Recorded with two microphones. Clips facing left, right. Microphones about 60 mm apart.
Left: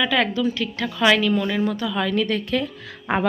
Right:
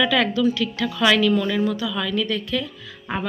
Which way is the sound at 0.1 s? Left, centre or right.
Left.